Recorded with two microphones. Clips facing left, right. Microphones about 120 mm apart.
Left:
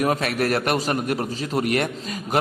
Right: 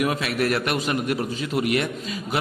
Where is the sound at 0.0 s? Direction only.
40° left (ahead or behind).